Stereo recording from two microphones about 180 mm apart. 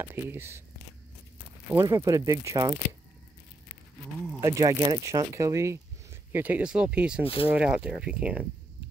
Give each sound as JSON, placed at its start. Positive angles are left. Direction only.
{"t": 0.0, "sound": "speech", "side_deg": -10}
{"t": 1.8, "sound": "speech", "side_deg": -15}
{"t": 4.4, "sound": "speech", "side_deg": -20}